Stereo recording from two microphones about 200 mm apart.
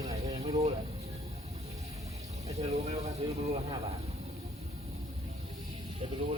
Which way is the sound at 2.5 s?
30° right (ahead or behind).